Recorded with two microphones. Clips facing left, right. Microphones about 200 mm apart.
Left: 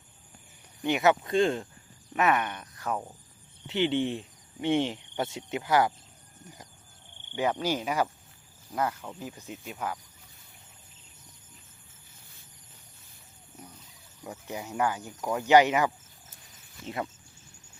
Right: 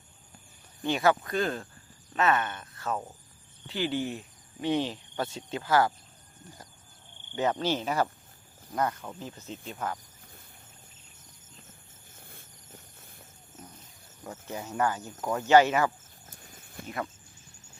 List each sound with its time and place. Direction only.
0.8 s speech: 20° left (ahead or behind)
7.6 s speech: 10° left (ahead or behind)
12.1 s a sound: 55° right (ahead or behind)
13.6 s cricket: 10° left (ahead or behind)
14.3 s speech: 15° left (ahead or behind)